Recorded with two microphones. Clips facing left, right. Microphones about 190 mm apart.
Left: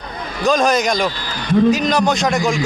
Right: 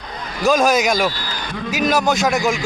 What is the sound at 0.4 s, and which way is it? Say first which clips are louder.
A man's voice: even; 5° right (ahead or behind).